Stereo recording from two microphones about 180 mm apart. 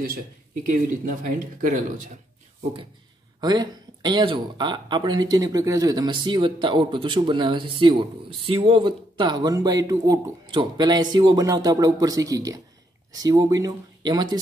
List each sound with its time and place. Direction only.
0.7 s speech: 50° right (ahead or behind)
3.3 s speech: 20° right (ahead or behind)